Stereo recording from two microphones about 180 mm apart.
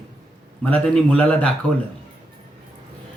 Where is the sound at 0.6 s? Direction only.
5° left (ahead or behind).